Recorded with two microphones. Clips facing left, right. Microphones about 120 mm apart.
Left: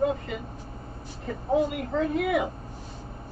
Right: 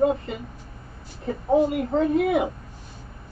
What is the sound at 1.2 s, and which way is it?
Speech, 35° right (ahead or behind).